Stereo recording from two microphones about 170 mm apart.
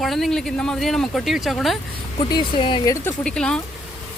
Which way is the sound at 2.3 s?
30° left (ahead or behind).